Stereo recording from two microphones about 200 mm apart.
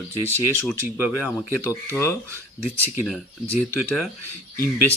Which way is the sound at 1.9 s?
15° left (ahead or behind).